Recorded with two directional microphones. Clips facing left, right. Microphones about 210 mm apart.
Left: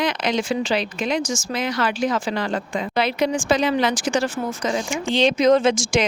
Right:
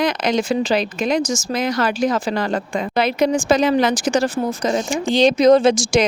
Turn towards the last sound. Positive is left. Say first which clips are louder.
# right 4 dB
turn(degrees=-35)  # may be behind; listen again after turning